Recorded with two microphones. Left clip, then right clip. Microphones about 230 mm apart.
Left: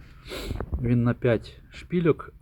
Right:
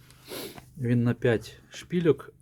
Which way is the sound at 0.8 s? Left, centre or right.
Centre.